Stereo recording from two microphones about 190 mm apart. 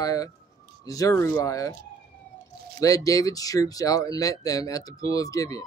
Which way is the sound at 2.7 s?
20° left (ahead or behind).